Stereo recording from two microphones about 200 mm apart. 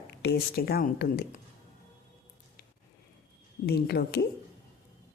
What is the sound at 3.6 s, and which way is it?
Speech, 55° left (ahead or behind).